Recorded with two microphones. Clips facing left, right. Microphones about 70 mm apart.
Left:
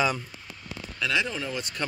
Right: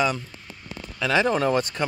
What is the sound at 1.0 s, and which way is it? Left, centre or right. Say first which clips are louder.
Speech: right 7 dB; right.